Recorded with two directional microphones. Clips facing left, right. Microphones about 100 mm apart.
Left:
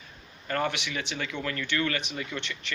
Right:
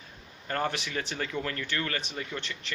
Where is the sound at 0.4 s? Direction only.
35° right (ahead or behind).